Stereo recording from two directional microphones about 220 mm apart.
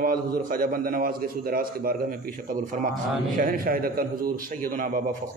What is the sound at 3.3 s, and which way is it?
A man's voice, 40° right (ahead or behind).